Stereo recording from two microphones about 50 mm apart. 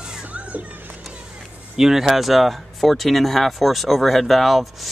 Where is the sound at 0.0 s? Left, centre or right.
Centre.